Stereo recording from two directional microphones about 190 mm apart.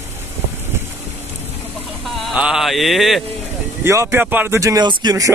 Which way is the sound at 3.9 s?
15° right (ahead or behind).